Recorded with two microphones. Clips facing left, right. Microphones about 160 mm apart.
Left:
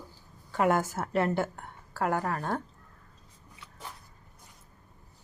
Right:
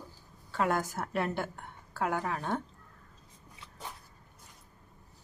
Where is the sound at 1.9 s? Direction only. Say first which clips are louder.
Left 3 dB; 5° left (ahead or behind).